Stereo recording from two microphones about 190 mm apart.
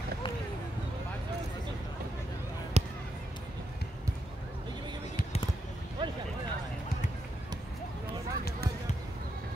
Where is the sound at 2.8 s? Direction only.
35° right (ahead or behind).